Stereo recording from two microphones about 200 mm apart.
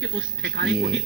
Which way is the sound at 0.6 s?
60° right (ahead or behind).